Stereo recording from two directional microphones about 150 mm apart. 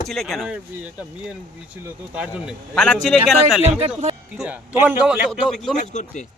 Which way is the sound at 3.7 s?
45° right (ahead or behind).